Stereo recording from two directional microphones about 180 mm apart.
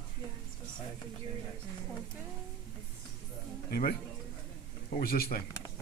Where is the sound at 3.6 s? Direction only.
55° left (ahead or behind).